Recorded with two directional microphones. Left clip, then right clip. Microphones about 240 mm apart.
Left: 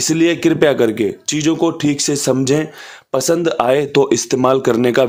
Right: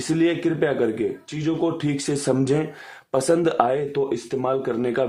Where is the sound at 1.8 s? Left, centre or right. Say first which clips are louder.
Left 8 dB; left.